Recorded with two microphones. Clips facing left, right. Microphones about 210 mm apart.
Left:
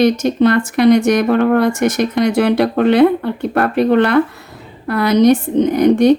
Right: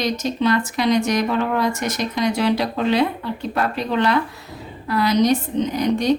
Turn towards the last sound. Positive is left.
turn(degrees=55)  # may be behind; listen again after turning